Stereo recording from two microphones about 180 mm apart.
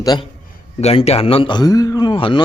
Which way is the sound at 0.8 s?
35° left (ahead or behind).